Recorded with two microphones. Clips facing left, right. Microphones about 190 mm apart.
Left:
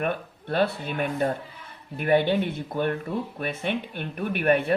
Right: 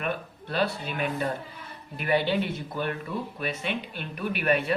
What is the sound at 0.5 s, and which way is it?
Speech, 55° left (ahead or behind).